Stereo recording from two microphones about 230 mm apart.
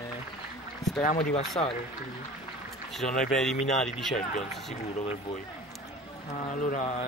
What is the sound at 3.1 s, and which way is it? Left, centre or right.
Speech, left.